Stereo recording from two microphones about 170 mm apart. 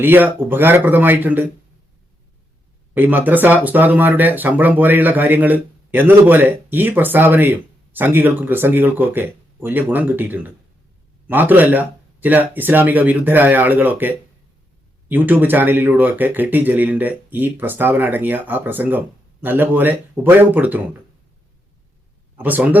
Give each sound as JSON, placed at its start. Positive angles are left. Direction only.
{"t": 0.0, "sound": "speech", "side_deg": -10}
{"t": 2.9, "sound": "speech", "side_deg": -10}
{"t": 15.1, "sound": "speech", "side_deg": -10}
{"t": 22.4, "sound": "speech", "side_deg": -10}